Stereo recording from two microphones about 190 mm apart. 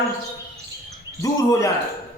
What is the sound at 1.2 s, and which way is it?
Speech, 15° left (ahead or behind).